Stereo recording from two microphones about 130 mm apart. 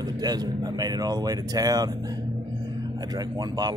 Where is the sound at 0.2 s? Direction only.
30° right (ahead or behind).